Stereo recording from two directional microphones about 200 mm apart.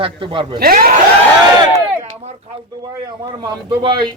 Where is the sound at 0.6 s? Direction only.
45° right (ahead or behind).